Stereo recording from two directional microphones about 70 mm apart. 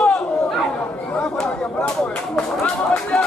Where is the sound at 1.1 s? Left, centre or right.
Centre.